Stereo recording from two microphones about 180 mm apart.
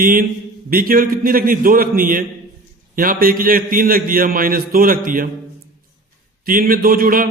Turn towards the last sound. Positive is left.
turn(degrees=-50)  # may be behind; listen again after turning